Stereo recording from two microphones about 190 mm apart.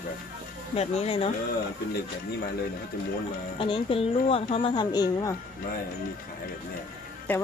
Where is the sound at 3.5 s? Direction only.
30° left (ahead or behind).